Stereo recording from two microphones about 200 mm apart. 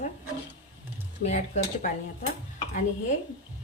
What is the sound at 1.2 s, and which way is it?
Speech, 35° left (ahead or behind).